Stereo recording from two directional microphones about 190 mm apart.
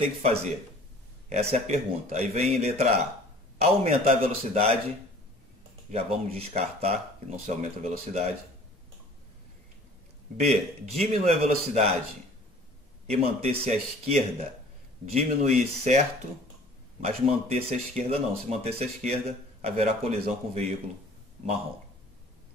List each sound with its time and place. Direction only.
0.0 s speech: 30° right (ahead or behind)
1.5 s speech: 30° right (ahead or behind)
5.9 s speech: 35° right (ahead or behind)
10.4 s speech: 35° right (ahead or behind)
13.0 s speech: 30° right (ahead or behind)
17.0 s speech: 30° right (ahead or behind)